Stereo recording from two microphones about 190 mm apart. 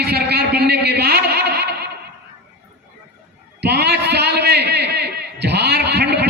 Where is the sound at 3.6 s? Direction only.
60° right (ahead or behind).